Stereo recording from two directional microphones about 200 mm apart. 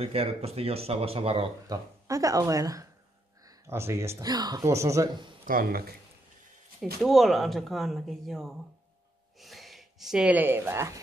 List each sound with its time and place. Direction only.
0.0 s speech: 30° right (ahead or behind)
1.7 s speech: 15° right (ahead or behind)
5.4 s speech: 45° right (ahead or behind)
7.0 s speech: centre (ahead or behind)